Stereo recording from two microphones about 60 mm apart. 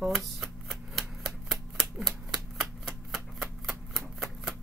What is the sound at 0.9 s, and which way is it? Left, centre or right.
Typewriter, centre.